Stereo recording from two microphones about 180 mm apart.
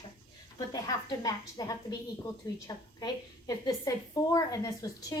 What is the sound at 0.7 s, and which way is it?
A woman's voice, 20° left (ahead or behind).